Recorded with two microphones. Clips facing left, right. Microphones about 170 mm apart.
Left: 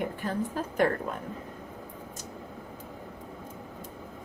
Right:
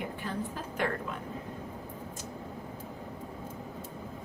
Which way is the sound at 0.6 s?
40° left (ahead or behind).